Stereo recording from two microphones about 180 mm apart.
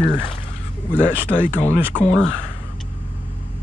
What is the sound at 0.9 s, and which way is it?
Speech, 10° left (ahead or behind).